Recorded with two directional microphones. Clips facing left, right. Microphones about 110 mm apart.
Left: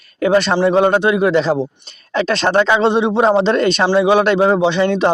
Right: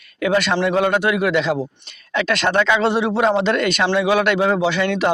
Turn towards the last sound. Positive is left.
turn(degrees=30)  # may be behind; listen again after turning